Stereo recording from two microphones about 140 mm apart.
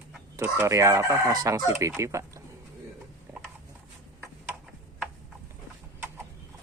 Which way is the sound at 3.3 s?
15° right (ahead or behind).